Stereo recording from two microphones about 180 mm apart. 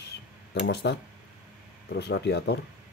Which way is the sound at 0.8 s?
75° left (ahead or behind).